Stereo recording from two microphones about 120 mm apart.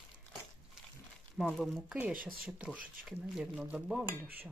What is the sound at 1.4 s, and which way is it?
Speech, centre (ahead or behind).